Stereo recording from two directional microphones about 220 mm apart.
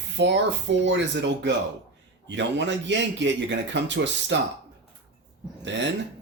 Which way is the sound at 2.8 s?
55° right (ahead or behind).